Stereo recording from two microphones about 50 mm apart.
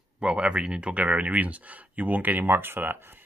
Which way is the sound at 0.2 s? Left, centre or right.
Right.